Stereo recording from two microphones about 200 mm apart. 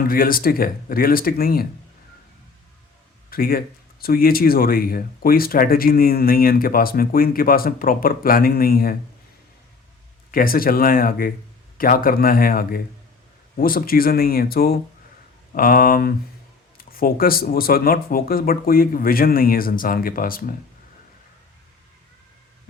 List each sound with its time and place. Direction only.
0.1 s speech: 45° left (ahead or behind)
3.2 s speech: 45° left (ahead or behind)
10.3 s speech: 45° left (ahead or behind)